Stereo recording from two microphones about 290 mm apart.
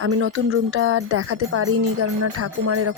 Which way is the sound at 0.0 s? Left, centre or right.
Right.